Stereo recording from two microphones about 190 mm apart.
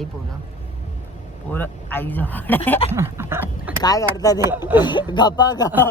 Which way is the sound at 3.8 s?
20° left (ahead or behind).